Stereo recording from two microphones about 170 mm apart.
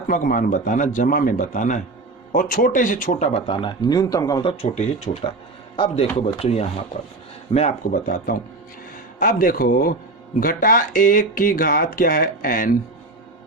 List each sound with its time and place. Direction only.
0.1 s a man's voice: 55° left (ahead or behind); by 4.4 s 20° left (ahead or behind)
4.4 s a man's voice: 40° left (ahead or behind); by 12.7 s 55° left (ahead or behind)